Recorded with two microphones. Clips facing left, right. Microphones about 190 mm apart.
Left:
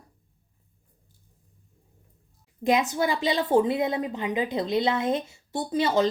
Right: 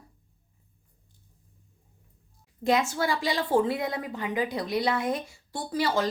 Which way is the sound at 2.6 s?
20° left (ahead or behind).